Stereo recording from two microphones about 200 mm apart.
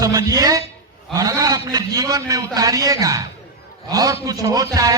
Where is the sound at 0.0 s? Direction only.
20° right (ahead or behind).